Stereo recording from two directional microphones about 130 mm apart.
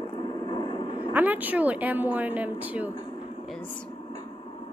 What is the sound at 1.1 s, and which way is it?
A woman's voice, 15° right (ahead or behind).